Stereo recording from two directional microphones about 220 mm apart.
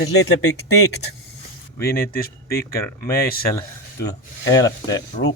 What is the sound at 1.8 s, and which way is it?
Speech, 45° left (ahead or behind).